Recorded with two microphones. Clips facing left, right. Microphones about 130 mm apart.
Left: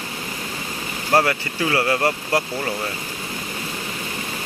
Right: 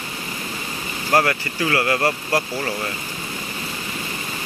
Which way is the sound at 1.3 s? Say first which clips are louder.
Even; 20° left (ahead or behind).